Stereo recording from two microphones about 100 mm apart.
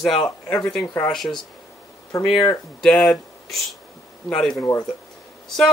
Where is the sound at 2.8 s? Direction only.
5° left (ahead or behind).